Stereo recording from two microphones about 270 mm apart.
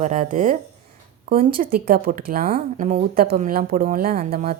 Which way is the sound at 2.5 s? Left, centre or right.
Right.